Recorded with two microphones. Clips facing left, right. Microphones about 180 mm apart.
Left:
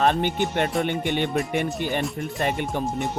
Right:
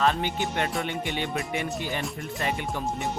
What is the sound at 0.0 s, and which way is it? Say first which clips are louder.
Music: left 3 dB; 55° left (ahead or behind).